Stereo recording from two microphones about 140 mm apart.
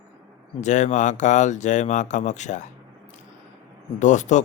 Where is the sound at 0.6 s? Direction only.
60° left (ahead or behind).